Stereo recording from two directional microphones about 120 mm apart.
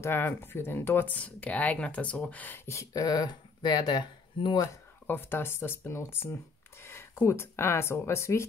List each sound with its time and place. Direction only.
0.0 s speech: 20° left (ahead or behind); by 4.6 s 40° left (ahead or behind)
4.6 s speech: 20° left (ahead or behind)